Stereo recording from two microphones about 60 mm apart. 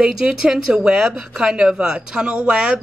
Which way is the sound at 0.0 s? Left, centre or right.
Centre.